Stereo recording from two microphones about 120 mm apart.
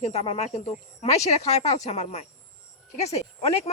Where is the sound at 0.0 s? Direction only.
65° left (ahead or behind).